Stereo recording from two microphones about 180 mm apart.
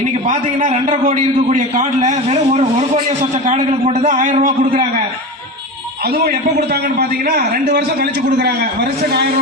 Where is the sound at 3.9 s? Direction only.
40° right (ahead or behind).